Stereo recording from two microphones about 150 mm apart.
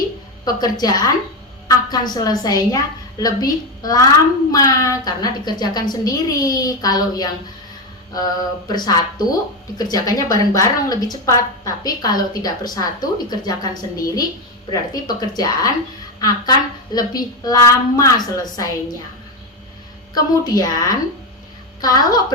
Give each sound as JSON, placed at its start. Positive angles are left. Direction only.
{"t": 0.4, "sound": "a woman's voice", "side_deg": 25}
{"t": 20.1, "sound": "a woman's voice", "side_deg": 25}